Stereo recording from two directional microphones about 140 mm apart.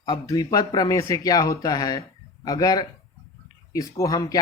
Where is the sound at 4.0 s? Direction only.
25° left (ahead or behind).